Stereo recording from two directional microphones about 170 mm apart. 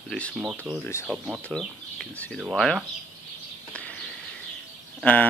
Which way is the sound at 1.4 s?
Centre (ahead or behind).